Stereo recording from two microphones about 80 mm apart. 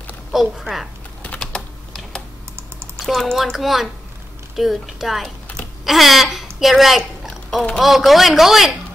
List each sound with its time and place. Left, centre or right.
0.3 s speech: centre
1.4 s typing: centre
3.0 s speech: centre